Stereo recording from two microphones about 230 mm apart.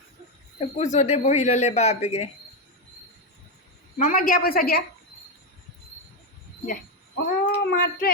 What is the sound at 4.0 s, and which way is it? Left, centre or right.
Speech, left.